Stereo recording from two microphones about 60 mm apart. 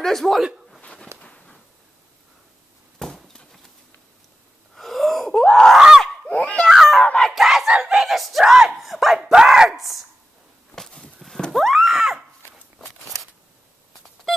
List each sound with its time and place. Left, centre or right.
0.0 s a man's voice: centre
0.4 s a man's voice: centre
1.2 s a sound: left
3.0 s a sound: centre
4.7 s wheeze: centre
5.3 s screaming: centre
6.2 s crying: centre
6.7 s a sound: centre
7.0 s crowd: centre
7.3 s a man's voice: centre
10.7 s a sound: centre
11.1 s horse: centre